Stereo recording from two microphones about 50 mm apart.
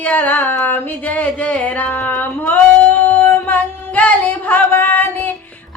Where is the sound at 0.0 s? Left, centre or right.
Left.